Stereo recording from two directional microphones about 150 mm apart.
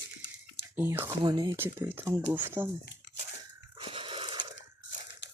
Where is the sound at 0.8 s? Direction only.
15° right (ahead or behind).